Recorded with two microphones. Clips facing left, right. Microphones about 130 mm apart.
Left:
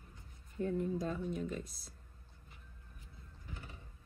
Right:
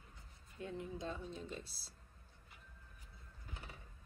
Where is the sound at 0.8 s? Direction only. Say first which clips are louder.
Left 8 dB; 20° right (ahead or behind).